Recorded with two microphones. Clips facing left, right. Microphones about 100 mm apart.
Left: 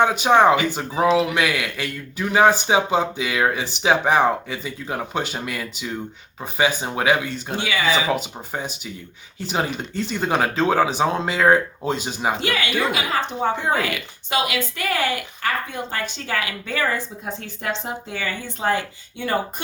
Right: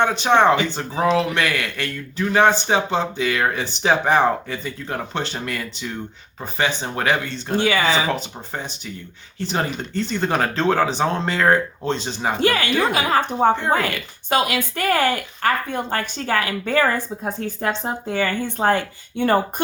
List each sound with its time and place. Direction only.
0.0 s speech: 5° left (ahead or behind)
7.6 s speech: 45° right (ahead or behind)
8.0 s speech: 5° left (ahead or behind)
12.4 s speech: 45° right (ahead or behind)
18.2 s speech: 55° right (ahead or behind)